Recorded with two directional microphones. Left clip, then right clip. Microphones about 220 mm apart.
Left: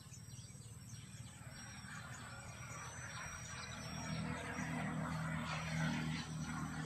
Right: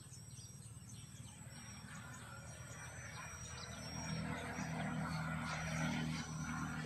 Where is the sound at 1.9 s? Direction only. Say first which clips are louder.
Left 3 dB; 30° left (ahead or behind).